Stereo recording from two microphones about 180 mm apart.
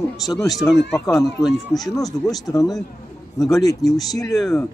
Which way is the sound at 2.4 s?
20° left (ahead or behind).